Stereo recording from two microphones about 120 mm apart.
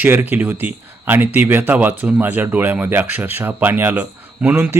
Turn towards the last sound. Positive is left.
turn(degrees=-20)  # may be behind; listen again after turning